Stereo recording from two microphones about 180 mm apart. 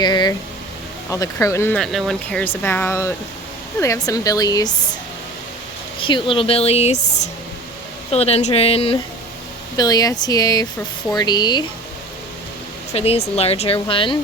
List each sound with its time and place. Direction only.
0.0 s speech: 25° left (ahead or behind)
6.0 s speech: 30° left (ahead or behind)
9.7 s speech: 20° left (ahead or behind)
12.9 s speech: 35° left (ahead or behind)